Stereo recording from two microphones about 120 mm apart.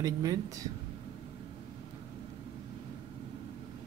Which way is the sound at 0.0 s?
30° right (ahead or behind).